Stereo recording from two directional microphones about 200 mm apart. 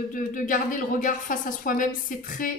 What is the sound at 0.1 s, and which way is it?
A woman's voice, 40° left (ahead or behind).